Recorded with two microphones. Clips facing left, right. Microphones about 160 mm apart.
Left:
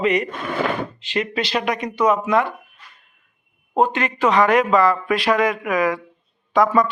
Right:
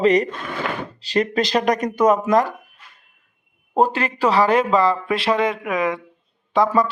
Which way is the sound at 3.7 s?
35° right (ahead or behind).